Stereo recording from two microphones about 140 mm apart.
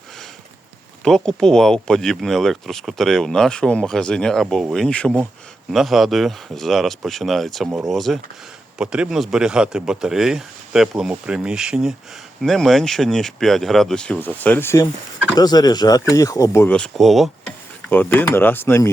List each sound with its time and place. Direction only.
1.0 s speech: 5° left (ahead or behind)
15.4 s speech: 30° left (ahead or behind)
16.7 s speech: 5° left (ahead or behind)
17.8 s speech: 10° left (ahead or behind)